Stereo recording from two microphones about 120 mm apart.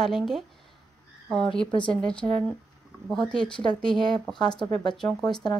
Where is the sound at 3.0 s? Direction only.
5° left (ahead or behind).